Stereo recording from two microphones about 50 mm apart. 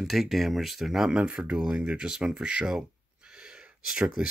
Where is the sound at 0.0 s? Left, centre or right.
Centre.